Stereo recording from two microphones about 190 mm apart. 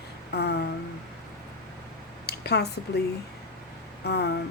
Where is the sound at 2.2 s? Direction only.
60° left (ahead or behind).